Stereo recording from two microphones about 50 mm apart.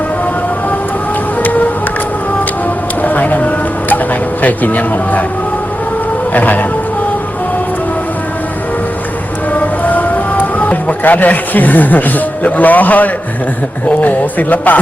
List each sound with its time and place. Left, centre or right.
1.4 s music: left
3.0 s vehicle: left
4.4 s speech: left
6.3 s speech: left
9.5 s music: left
13.8 s speech: left